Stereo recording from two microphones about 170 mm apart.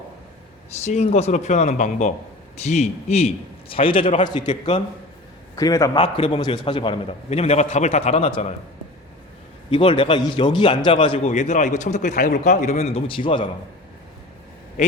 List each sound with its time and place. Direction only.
0.7 s a man's voice: 40° left (ahead or behind)
4.4 s a man's voice: 40° left (ahead or behind)
5.5 s a man's voice: 20° left (ahead or behind)
6.0 s a man's voice: 35° left (ahead or behind)
9.6 s a man's voice: 30° left (ahead or behind)
11.3 s a man's voice: 45° left (ahead or behind); by 13.5 s 30° left (ahead or behind)